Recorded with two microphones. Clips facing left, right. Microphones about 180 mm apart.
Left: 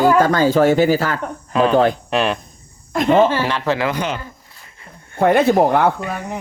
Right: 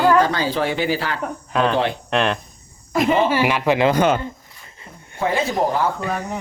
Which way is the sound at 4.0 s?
50° right (ahead or behind).